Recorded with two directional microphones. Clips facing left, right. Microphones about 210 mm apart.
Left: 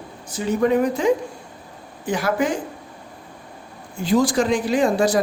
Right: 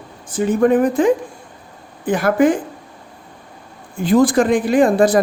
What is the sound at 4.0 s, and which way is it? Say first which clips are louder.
Speech: right 5 dB; 55° right (ahead or behind).